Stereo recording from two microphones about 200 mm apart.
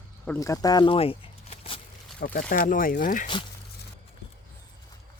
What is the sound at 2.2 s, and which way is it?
Speech, 45° left (ahead or behind).